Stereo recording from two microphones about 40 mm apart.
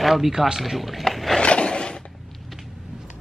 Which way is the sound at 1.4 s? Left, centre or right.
Left.